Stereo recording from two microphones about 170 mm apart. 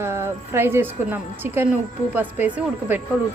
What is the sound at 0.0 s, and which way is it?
A woman's voice, 15° right (ahead or behind).